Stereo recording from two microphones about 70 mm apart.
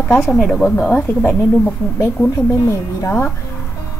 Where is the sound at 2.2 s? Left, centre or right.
Left.